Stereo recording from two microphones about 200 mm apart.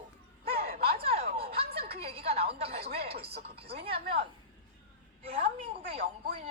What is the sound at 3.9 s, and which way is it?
Speech, 50° right (ahead or behind).